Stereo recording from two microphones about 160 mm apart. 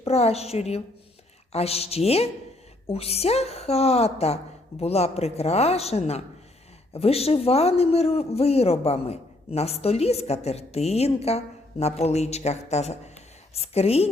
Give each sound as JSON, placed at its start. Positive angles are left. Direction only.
{"t": 0.0, "sound": "a man's voice", "side_deg": 40}